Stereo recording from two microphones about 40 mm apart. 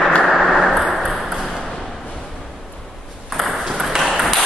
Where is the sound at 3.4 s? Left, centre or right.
Centre.